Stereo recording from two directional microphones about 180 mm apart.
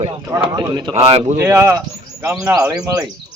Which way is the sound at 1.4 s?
15° right (ahead or behind).